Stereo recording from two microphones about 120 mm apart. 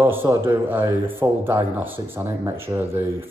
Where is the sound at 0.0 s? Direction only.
20° right (ahead or behind).